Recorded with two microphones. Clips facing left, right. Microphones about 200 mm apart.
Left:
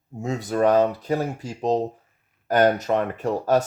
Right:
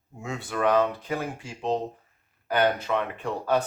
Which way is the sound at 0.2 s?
40° left (ahead or behind).